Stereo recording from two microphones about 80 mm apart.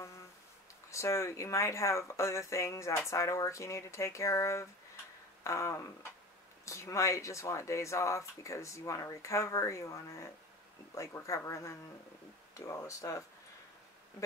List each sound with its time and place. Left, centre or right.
0.8 s speech: left
5.4 s a sound: left
6.6 s speech: left